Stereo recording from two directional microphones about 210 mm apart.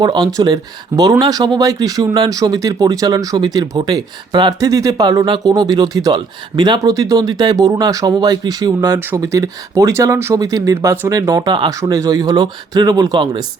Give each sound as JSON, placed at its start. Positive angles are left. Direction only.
{"t": 0.0, "sound": "speech", "side_deg": -20}